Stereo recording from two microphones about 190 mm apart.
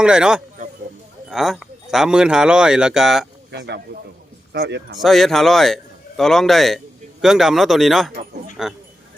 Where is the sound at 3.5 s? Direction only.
60° right (ahead or behind).